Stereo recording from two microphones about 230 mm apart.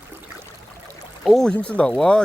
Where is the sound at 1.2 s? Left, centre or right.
Centre.